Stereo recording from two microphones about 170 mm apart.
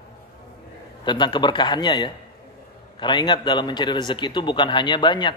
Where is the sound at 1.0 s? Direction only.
25° left (ahead or behind).